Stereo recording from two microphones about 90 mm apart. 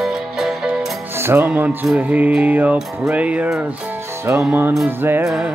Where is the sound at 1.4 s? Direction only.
15° right (ahead or behind).